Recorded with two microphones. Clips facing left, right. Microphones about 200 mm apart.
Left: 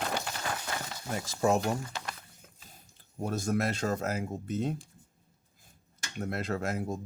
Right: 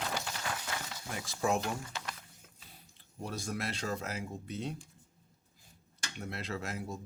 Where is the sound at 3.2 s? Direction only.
45° left (ahead or behind).